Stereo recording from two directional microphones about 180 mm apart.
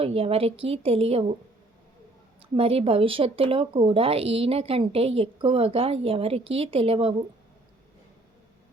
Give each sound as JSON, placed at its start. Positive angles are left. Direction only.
{"t": 0.0, "sound": "speech", "side_deg": -30}
{"t": 2.6, "sound": "speech", "side_deg": -30}